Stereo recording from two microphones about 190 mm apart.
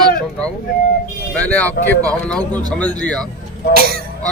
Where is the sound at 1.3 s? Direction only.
5° left (ahead or behind).